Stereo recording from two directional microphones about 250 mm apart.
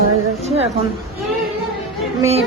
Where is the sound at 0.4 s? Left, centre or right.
Right.